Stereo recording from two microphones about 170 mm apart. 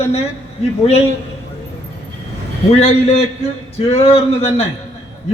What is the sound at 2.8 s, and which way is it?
A man's voice, 35° left (ahead or behind).